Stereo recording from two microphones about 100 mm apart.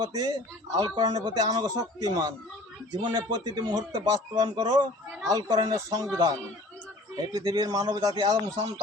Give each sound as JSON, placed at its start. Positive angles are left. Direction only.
{"t": 0.0, "sound": "a man's voice", "side_deg": -40}
{"t": 7.3, "sound": "speech", "side_deg": -40}